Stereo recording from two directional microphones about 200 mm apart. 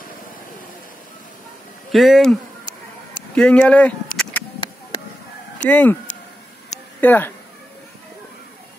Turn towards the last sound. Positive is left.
turn(degrees=10)  # may be behind; listen again after turning